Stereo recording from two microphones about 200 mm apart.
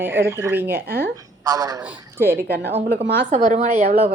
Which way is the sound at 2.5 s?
55° right (ahead or behind).